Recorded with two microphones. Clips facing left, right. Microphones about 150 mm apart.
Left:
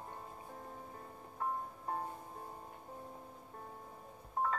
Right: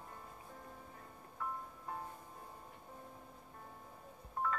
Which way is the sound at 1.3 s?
40° left (ahead or behind).